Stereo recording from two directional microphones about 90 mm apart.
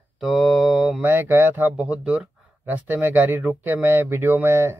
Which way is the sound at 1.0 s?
25° right (ahead or behind).